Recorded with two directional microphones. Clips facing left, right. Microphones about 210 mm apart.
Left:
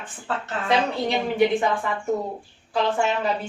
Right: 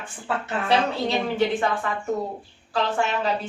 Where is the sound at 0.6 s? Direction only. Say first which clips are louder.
Even; 15° left (ahead or behind).